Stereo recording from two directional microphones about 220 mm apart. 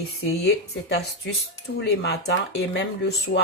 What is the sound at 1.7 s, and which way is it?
Speech, 50° left (ahead or behind).